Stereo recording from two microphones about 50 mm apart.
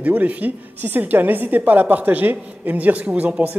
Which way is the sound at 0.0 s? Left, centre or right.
Right.